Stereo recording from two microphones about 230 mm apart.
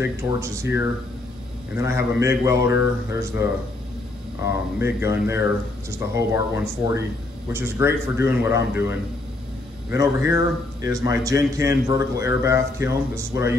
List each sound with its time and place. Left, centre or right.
0.0 s a man's voice: centre
4.7 s a man's voice: centre